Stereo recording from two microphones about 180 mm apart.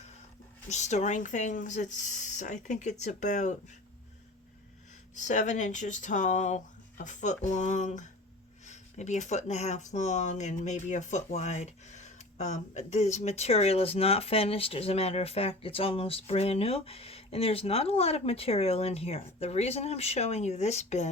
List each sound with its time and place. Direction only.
0.7 s speech: 40° left (ahead or behind)
5.1 s speech: 40° left (ahead or behind)